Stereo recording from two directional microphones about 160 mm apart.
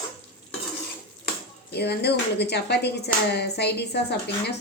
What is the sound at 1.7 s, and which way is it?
A woman's voice, 90° left.